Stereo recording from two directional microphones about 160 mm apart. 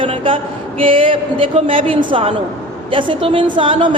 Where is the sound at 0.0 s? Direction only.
35° right (ahead or behind).